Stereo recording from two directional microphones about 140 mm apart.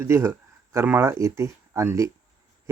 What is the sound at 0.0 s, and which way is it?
Speech, 20° right (ahead or behind).